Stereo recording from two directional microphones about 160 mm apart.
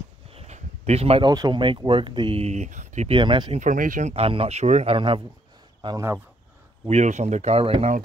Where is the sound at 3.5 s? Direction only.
55° right (ahead or behind).